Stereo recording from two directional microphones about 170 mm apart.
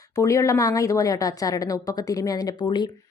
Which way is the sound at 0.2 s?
20° left (ahead or behind).